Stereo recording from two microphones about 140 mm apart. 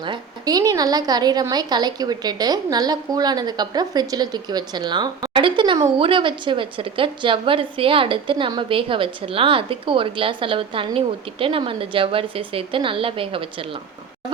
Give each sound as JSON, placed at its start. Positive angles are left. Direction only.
{"t": 0.0, "sound": "a woman's voice", "side_deg": -30}